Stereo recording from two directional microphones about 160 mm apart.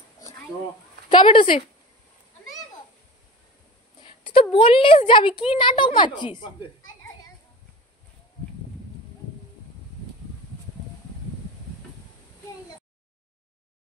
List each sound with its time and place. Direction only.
1.1 s a woman's voice: 30° left (ahead or behind)
4.0 s a woman's voice: 35° left (ahead or behind)